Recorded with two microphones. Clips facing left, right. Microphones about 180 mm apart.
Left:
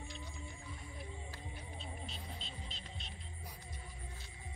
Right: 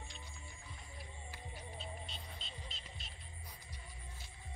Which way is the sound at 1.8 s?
Centre (ahead or behind).